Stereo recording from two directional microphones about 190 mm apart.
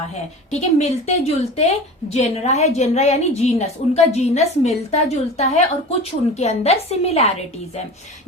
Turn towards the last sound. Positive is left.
turn(degrees=35)  # may be behind; listen again after turning